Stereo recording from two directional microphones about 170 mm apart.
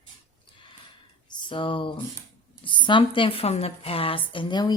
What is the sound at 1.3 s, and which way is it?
A woman's voice, 30° left (ahead or behind).